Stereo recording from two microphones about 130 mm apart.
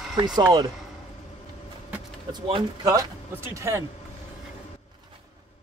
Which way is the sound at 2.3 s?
35° right (ahead or behind).